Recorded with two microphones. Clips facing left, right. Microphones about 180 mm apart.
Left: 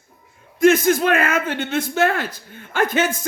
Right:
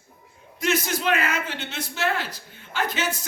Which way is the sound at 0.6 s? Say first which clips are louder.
Left 11 dB; 50° left (ahead or behind).